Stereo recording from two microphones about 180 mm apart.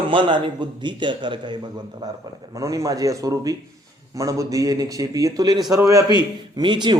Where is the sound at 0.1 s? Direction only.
30° right (ahead or behind).